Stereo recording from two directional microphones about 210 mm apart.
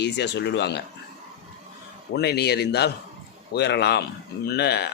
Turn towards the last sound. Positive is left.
turn(degrees=50)  # may be behind; listen again after turning